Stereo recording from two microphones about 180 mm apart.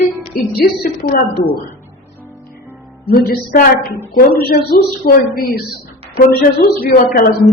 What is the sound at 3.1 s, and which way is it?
A woman's voice, 55° left (ahead or behind).